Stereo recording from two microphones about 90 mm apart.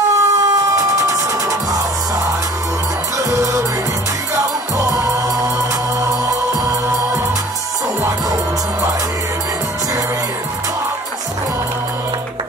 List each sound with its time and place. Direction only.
0.1 s vehicle: 40° right (ahead or behind)
3.2 s music: 40° right (ahead or behind)